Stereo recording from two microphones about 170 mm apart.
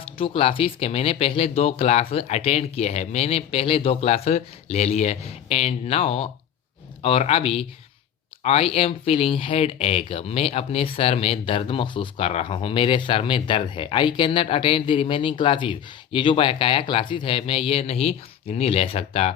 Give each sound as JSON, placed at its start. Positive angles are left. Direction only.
{"t": 0.2, "sound": "speech", "side_deg": 35}